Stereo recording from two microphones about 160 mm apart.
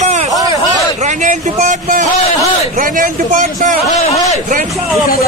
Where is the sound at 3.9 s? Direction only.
45° left (ahead or behind).